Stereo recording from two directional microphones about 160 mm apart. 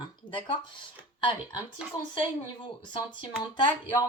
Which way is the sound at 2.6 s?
30° left (ahead or behind).